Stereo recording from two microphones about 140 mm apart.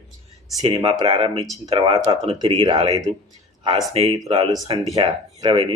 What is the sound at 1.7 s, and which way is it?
Speech, 45° right (ahead or behind).